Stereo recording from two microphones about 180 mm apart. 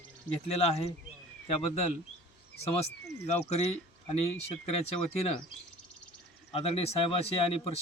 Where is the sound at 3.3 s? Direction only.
35° left (ahead or behind).